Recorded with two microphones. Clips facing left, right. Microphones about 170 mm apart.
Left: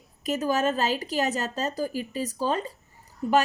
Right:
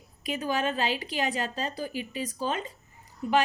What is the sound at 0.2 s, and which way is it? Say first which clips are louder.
A woman's voice: left 4 dB; 40° left (ahead or behind).